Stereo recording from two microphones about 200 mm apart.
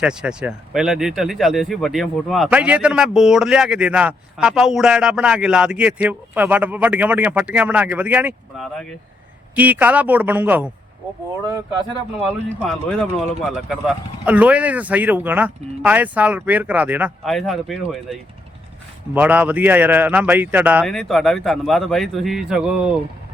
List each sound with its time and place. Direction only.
0.0 s speech: 5° right (ahead or behind)
12.6 s speech: centre (ahead or behind)
20.8 s speech: centre (ahead or behind)